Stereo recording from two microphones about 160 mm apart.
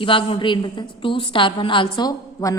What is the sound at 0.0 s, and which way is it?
A woman's voice, 35° left (ahead or behind).